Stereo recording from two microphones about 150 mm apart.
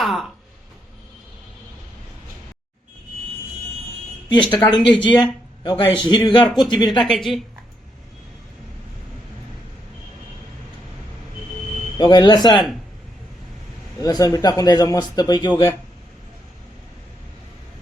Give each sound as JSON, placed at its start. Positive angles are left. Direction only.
{"t": 0.0, "sound": "a sound", "side_deg": 0}
{"t": 4.3, "sound": "speech", "side_deg": 30}
{"t": 5.2, "sound": "a sound", "side_deg": 35}
{"t": 6.0, "sound": "speech", "side_deg": 30}
{"t": 7.0, "sound": "a woman's voice", "side_deg": 0}
{"t": 11.9, "sound": "speech", "side_deg": 30}
{"t": 14.0, "sound": "speech", "side_deg": 25}